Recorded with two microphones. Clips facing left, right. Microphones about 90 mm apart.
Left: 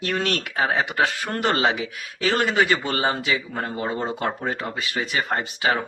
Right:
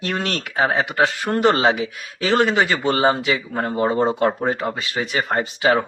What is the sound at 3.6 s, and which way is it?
A man's voice, 40° right (ahead or behind).